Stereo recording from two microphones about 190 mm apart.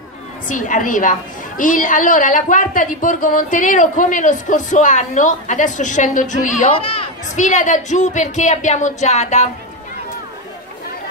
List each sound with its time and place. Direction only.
0.5 s a woman's voice: 45° left (ahead or behind)